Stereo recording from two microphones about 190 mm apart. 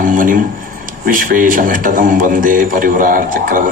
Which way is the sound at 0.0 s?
45° right (ahead or behind).